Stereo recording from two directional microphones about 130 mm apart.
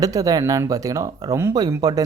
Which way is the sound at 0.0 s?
25° right (ahead or behind).